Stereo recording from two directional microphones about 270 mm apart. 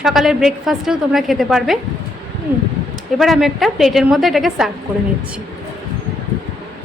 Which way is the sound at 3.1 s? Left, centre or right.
Centre.